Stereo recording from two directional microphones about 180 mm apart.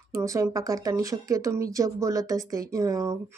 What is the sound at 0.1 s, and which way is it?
Speech, 15° right (ahead or behind).